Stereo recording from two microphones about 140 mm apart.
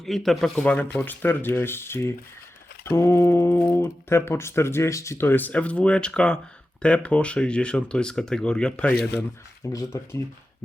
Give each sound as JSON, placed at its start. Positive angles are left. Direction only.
{"t": 0.0, "sound": "speech", "side_deg": 0}
{"t": 9.6, "sound": "speech", "side_deg": 20}